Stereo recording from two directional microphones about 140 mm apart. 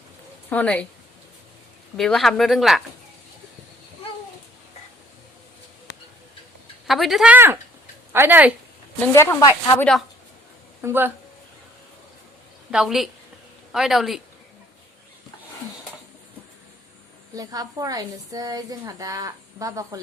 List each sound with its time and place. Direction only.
0.5 s speech: 10° left (ahead or behind)
2.0 s speech: centre (ahead or behind)
6.8 s speech: centre (ahead or behind)
7.3 s speech: 15° right (ahead or behind)
9.1 s speech: 20° left (ahead or behind)
10.8 s speech: 15° right (ahead or behind)
12.7 s speech: centre (ahead or behind)
17.3 s a woman's voice: 25° right (ahead or behind)